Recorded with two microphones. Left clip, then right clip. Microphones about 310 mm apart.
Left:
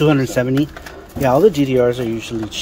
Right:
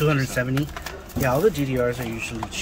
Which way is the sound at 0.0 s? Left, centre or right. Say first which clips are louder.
Left 7 dB; left.